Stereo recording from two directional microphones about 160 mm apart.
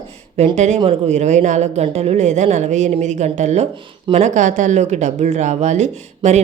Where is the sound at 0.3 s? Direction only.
45° right (ahead or behind).